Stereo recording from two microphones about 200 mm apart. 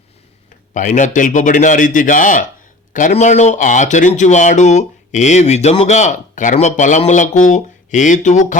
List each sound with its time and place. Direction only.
0.7 s speech: 40° left (ahead or behind)